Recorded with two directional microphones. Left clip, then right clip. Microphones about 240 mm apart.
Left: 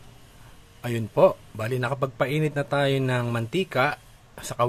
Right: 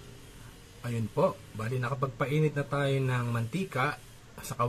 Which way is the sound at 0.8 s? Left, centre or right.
Left.